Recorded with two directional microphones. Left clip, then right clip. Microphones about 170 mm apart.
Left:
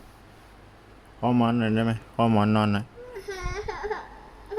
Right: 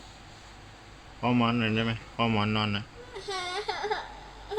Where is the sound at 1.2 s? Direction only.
35° left (ahead or behind); by 2.8 s 50° left (ahead or behind).